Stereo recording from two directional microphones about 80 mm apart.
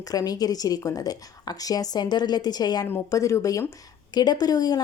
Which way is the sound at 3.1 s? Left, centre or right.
Left.